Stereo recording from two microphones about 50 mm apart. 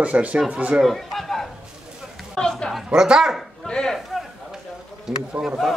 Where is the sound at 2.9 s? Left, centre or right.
Centre.